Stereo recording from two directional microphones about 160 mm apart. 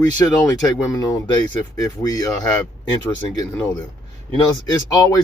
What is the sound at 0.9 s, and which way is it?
Speech, 20° left (ahead or behind).